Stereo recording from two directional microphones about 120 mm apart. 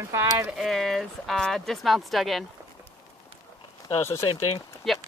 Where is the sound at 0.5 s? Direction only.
Centre (ahead or behind).